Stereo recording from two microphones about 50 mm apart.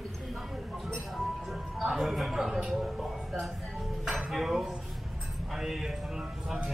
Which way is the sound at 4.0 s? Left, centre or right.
Centre.